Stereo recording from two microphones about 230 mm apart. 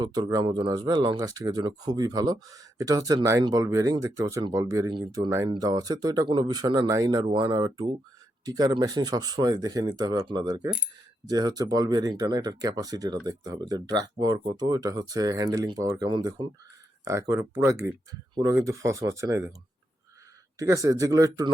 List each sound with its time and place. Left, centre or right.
0.0 s speech: centre
20.6 s speech: centre